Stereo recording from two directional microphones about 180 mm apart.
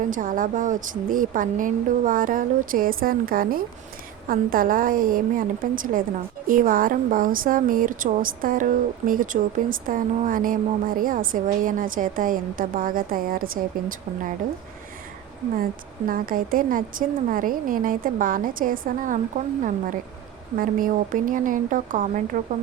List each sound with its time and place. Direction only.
0.1 s a woman's voice: 50° right (ahead or behind)
16.0 s a woman's voice: 50° right (ahead or behind)
20.6 s a woman's voice: 50° right (ahead or behind)